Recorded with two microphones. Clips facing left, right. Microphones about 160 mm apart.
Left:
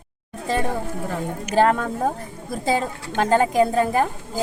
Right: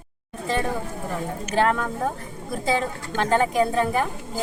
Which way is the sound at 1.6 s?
35° left (ahead or behind).